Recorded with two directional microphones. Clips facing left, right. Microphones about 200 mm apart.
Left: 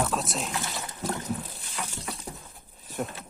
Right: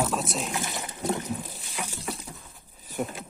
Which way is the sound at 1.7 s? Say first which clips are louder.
Right 1 dB; 10° right (ahead or behind).